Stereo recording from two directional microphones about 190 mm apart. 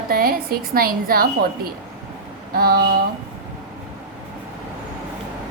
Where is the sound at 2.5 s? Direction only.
50° right (ahead or behind).